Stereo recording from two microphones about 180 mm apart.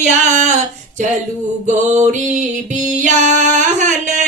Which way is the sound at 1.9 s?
40° right (ahead or behind).